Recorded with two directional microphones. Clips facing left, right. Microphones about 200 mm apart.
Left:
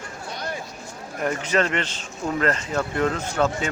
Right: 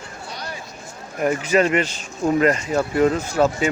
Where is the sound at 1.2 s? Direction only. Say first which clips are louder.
Right 5 dB; 10° right (ahead or behind).